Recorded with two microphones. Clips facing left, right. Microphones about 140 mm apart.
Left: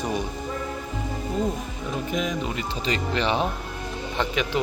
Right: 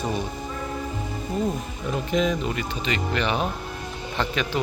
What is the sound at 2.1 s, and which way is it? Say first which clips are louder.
Speech: right 5 dB; 10° left (ahead or behind).